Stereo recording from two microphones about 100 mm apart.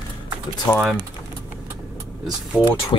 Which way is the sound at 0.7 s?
15° left (ahead or behind).